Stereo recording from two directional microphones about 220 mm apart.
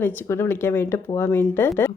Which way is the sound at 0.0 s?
10° left (ahead or behind).